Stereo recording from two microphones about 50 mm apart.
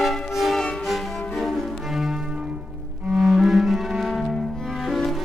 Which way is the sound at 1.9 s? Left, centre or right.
Centre.